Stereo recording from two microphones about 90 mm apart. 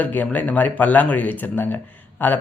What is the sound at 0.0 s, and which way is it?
Speech, 15° left (ahead or behind).